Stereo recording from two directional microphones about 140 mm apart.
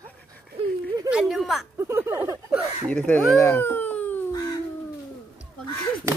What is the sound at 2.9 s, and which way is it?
Speech, 10° left (ahead or behind).